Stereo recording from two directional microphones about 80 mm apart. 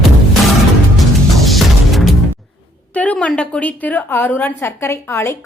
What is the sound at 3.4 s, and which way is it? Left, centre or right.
A woman's voice, centre.